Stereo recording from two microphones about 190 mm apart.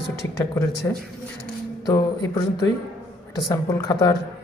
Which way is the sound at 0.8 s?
15° left (ahead or behind).